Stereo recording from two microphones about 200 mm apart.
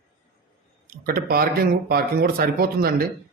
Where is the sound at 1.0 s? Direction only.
50° right (ahead or behind).